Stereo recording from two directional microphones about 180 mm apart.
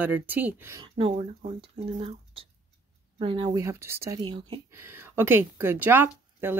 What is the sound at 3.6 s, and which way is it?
Speech, 15° right (ahead or behind).